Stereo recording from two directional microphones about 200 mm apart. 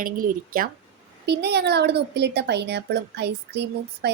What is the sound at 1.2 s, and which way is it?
Speech, 55° right (ahead or behind).